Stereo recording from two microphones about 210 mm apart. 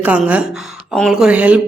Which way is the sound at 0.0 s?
5° right (ahead or behind).